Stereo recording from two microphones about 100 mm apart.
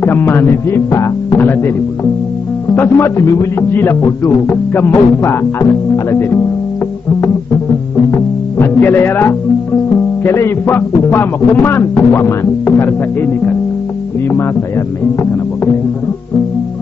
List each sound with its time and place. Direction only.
0.0 s speech: 20° left (ahead or behind)
2.7 s speech: 20° left (ahead or behind)
8.1 s music: 20° left (ahead or behind)
10.2 s speech: 25° left (ahead or behind)